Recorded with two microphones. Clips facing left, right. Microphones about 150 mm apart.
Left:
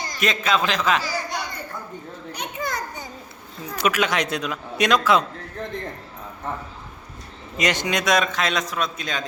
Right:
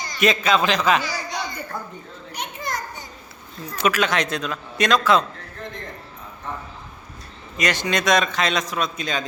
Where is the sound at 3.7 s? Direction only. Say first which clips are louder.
Right 1 dB; 10° left (ahead or behind).